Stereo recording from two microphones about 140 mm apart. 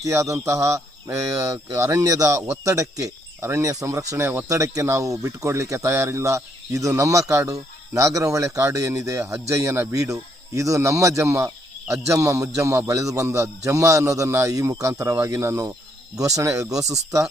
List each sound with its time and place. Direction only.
0.0 s speech: 20° right (ahead or behind)